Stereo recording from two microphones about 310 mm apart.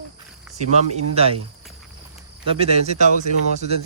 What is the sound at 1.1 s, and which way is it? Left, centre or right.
Speech, centre.